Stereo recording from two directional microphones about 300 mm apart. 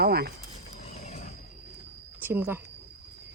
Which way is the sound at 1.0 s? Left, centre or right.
Left.